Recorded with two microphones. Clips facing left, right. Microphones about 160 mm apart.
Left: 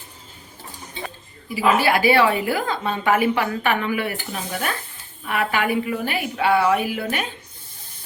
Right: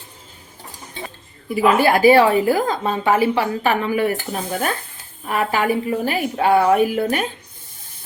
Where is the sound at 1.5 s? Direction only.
50° right (ahead or behind).